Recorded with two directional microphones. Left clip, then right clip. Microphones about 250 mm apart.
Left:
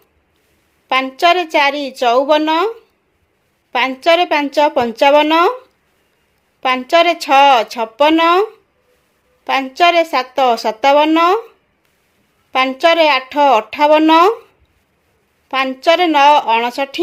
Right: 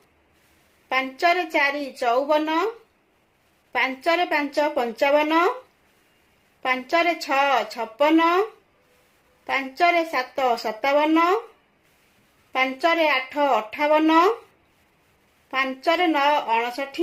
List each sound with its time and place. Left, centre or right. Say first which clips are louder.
0.9 s a woman's voice: left 8 dB; left
3.7 s a woman's voice: left 9 dB; left
6.6 s a woman's voice: left 9 dB; left
12.5 s a woman's voice: left 9 dB; left
15.4 s a woman's voice: left 9 dB; left